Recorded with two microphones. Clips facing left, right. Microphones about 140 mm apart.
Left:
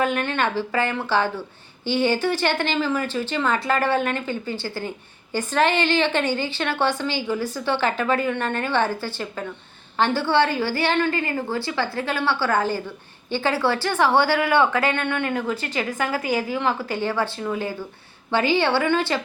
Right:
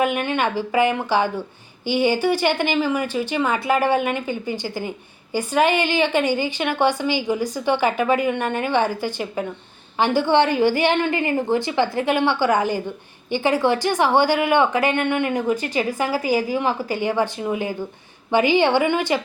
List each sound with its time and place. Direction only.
0.0 s a woman's voice: 15° right (ahead or behind)